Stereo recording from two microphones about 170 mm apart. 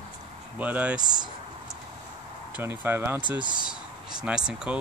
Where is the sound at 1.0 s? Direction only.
25° right (ahead or behind).